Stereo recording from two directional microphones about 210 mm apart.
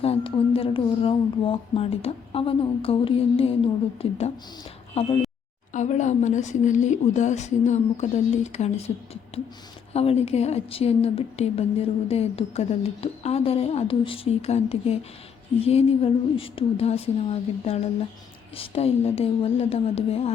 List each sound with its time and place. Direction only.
0.0 s a woman's voice: 25° left (ahead or behind)
5.7 s a woman's voice: 35° left (ahead or behind)
9.9 s a woman's voice: 30° left (ahead or behind)